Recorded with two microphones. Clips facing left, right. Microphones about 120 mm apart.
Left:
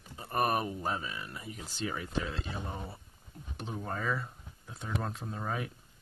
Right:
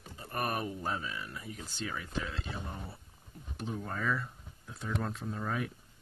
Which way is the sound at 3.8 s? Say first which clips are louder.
Left 1 dB; 15° left (ahead or behind).